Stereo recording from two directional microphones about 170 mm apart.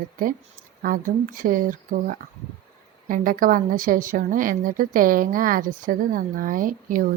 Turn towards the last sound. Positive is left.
turn(degrees=-55)  # may be behind; listen again after turning